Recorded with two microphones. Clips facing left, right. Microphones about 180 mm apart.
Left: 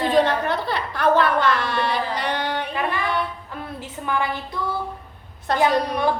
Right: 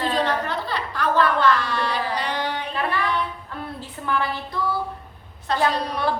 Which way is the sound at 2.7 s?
15° left (ahead or behind).